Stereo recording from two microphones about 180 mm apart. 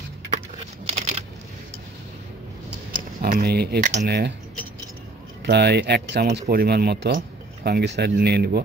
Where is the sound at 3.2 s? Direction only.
55° right (ahead or behind).